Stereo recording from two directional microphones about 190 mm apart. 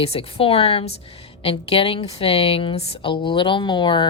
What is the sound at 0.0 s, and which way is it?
Speech, 30° left (ahead or behind).